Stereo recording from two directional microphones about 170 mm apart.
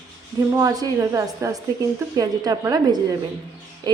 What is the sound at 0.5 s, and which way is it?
A woman's voice, 20° right (ahead or behind).